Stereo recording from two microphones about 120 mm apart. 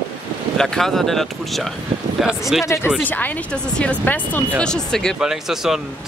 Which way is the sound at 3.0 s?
15° left (ahead or behind).